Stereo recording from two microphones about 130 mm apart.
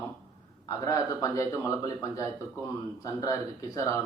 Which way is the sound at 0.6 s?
25° left (ahead or behind).